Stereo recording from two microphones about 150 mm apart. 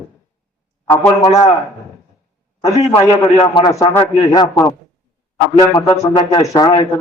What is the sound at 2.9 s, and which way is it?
Speech, 20° left (ahead or behind).